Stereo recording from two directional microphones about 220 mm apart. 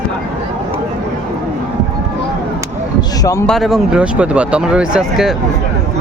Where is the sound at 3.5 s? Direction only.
Centre (ahead or behind).